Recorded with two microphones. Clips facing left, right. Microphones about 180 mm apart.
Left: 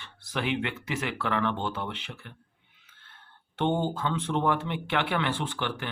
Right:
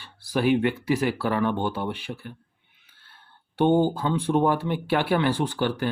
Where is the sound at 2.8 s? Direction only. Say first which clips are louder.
Even; 35° right (ahead or behind).